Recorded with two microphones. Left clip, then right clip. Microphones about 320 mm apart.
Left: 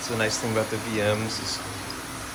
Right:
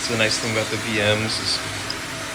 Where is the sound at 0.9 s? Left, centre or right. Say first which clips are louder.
Right 5 dB; centre.